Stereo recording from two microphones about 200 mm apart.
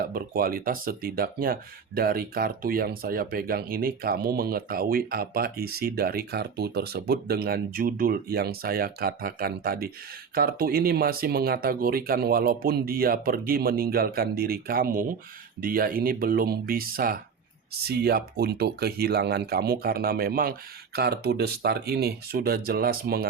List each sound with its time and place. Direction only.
0.0 s speech: 50° right (ahead or behind)